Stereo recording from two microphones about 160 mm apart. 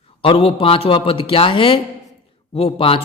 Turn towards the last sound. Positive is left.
turn(degrees=35)  # may be behind; listen again after turning